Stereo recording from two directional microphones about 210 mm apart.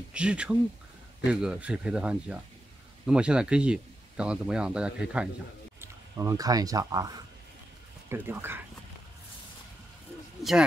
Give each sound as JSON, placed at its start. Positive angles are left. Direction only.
{"t": 0.1, "sound": "speech", "side_deg": -5}
{"t": 5.8, "sound": "speech", "side_deg": -15}